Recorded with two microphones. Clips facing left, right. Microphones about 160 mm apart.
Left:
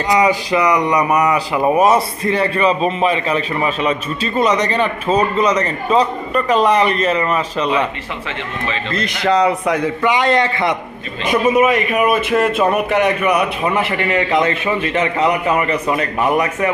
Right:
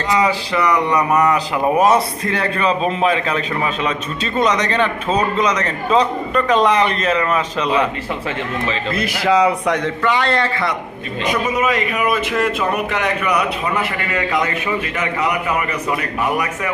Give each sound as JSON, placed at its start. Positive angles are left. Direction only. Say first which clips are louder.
{"t": 0.1, "sound": "a man's voice", "louder": "left 3 dB", "side_deg": 15}
{"t": 1.5, "sound": "a man's voice", "louder": "left 2 dB", "side_deg": 0}
{"t": 8.9, "sound": "a man's voice", "louder": "even", "side_deg": -5}